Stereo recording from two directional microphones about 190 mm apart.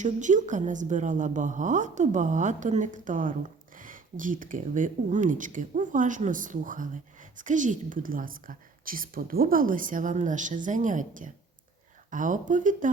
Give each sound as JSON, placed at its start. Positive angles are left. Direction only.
{"t": 0.0, "sound": "a woman's voice", "side_deg": -40}